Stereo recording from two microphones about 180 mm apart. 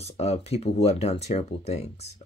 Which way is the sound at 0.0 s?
35° left (ahead or behind).